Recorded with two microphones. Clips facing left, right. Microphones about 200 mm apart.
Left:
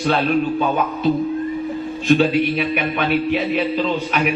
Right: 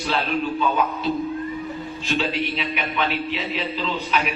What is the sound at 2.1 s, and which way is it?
A man's voice, 50° left (ahead or behind).